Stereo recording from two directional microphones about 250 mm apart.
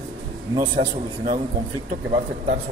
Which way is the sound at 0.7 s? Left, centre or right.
Right.